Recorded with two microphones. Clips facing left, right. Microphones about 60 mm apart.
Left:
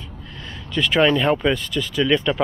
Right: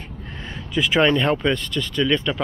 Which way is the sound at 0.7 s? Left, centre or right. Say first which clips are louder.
Left 1 dB; centre.